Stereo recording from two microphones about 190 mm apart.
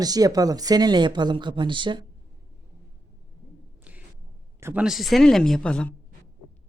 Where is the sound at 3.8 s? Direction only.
5° right (ahead or behind).